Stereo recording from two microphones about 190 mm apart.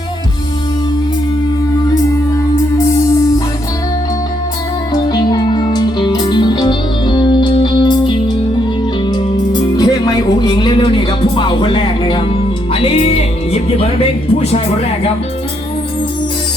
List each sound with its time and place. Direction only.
5.0 s music: 25° left (ahead or behind)